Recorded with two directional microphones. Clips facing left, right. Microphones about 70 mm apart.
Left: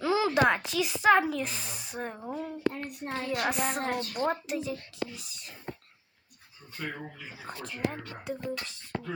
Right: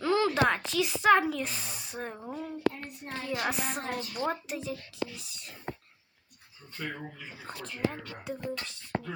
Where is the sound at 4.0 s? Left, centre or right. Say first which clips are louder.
Left 3 dB; left.